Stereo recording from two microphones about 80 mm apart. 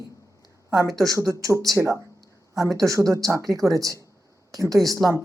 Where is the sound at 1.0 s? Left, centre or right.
Right.